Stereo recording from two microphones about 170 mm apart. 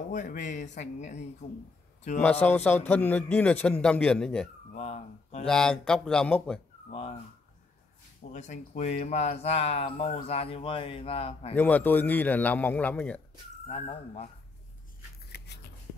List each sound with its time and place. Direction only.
0.1 s speech: 50° left (ahead or behind)
2.4 s a man's voice: 10° left (ahead or behind)
4.7 s a man's voice: 40° left (ahead or behind)
5.5 s speech: 5° left (ahead or behind)
6.9 s speech: 35° left (ahead or behind)
8.3 s a man's voice: 45° left (ahead or behind)
11.5 s a man's voice: 10° left (ahead or behind)
13.7 s a man's voice: 40° left (ahead or behind)
15.3 s a sound: 80° left